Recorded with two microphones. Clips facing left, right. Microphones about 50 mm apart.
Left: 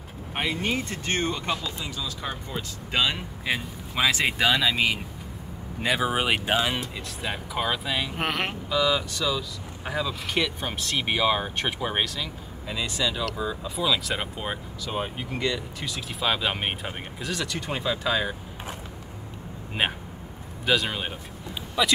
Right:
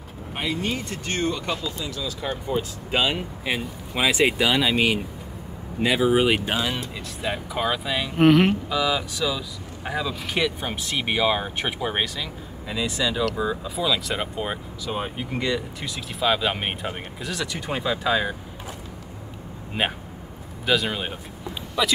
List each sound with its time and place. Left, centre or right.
0.3 s speech: left
2.0 s speech: centre
2.4 s speech: centre
6.0 s speech: centre
6.5 s speech: centre
7.2 s speech: centre
19.8 s speech: centre